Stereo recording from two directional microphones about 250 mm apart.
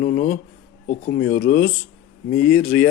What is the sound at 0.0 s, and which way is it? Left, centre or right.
Speech, left.